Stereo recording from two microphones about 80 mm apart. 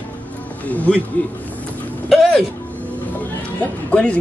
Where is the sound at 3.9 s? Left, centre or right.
Centre.